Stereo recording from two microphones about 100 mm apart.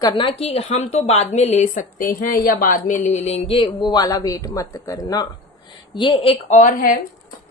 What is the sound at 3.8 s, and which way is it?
Speech, 45° left (ahead or behind).